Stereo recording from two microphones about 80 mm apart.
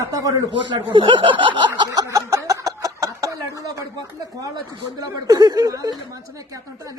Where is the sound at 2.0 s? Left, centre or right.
Right.